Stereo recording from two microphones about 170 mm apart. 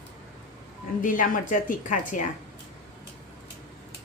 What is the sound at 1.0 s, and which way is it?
Speech, 50° left (ahead or behind).